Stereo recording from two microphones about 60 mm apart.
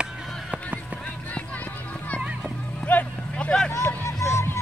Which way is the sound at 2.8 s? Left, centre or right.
Left.